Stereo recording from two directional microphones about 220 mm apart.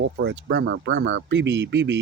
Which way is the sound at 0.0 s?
50° right (ahead or behind).